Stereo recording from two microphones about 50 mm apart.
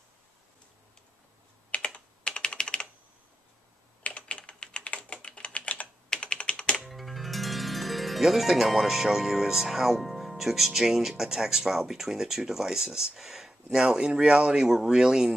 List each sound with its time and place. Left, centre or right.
1.7 s computer keyboard: left
4.0 s typing: left
6.0 s computer keyboard: centre
6.8 s speech: centre